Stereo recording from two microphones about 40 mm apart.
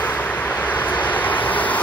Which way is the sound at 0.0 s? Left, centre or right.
Left.